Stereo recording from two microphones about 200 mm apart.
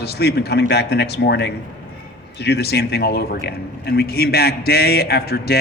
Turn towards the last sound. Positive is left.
turn(degrees=50)  # may be behind; listen again after turning